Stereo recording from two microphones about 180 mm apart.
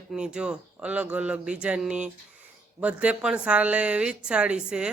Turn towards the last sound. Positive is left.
turn(degrees=-5)  # may be behind; listen again after turning